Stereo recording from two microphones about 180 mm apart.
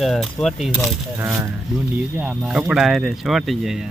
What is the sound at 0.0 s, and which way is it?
Speech, centre (ahead or behind).